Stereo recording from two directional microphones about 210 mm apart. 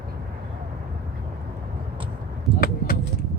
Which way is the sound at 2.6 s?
45° left (ahead or behind).